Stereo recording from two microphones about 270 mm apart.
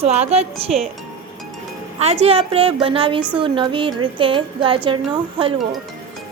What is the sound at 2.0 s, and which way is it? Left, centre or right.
Speech, right.